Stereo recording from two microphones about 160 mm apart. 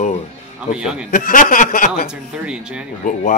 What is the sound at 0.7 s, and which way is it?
Speech, 5° right (ahead or behind).